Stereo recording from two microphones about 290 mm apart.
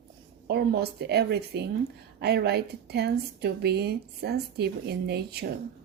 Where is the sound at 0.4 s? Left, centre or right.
Right.